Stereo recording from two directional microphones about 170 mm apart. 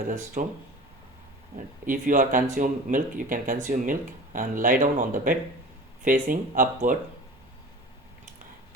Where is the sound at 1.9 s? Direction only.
50° right (ahead or behind).